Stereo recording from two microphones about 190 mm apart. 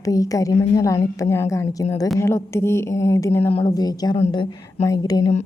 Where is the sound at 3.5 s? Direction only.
30° left (ahead or behind).